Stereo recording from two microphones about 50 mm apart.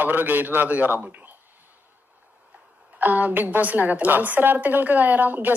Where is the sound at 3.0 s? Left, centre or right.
Right.